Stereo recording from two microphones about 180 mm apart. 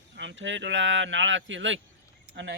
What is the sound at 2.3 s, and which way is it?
Speech, 75° right (ahead or behind).